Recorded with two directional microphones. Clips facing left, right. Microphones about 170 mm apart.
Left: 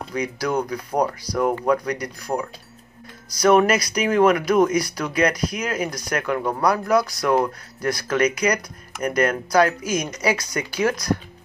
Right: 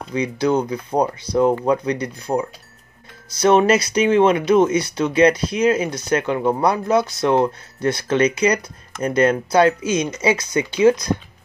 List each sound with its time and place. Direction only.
0.1 s speech: 25° right (ahead or behind)